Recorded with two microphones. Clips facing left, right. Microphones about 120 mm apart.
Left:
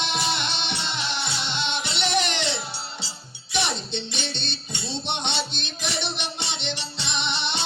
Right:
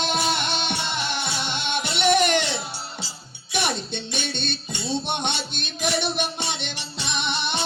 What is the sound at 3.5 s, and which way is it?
Music, 50° right (ahead or behind).